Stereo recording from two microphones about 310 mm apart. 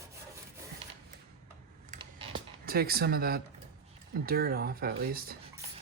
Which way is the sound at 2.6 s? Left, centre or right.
Right.